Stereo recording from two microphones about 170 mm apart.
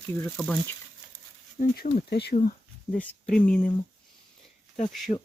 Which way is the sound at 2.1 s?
70° left (ahead or behind).